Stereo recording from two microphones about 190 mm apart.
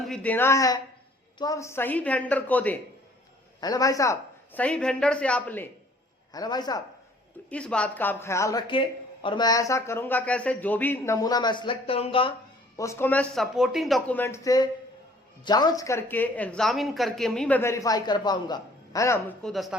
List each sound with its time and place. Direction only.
0.0 s speech: 5° left (ahead or behind)
3.6 s speech: 20° left (ahead or behind)
6.3 s a man's voice: 20° left (ahead or behind)
7.5 s speech: 5° left (ahead or behind); by 12.3 s 30° left (ahead or behind)
12.7 s speech: 15° left (ahead or behind); by 14.2 s centre (ahead or behind)
14.2 s speech: 15° left (ahead or behind)
19.4 s speech: centre (ahead or behind)